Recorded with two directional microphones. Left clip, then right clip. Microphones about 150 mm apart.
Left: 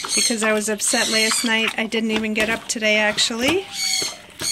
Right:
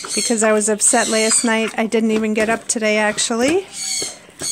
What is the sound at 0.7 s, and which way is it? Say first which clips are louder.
Speech: right 3 dB; 25° right (ahead or behind).